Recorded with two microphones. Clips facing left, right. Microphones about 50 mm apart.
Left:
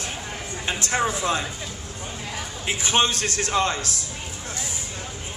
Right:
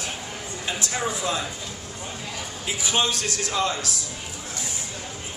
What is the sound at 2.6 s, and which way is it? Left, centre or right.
Speech, left.